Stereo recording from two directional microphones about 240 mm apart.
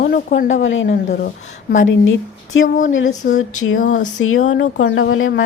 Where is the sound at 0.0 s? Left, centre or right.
Left.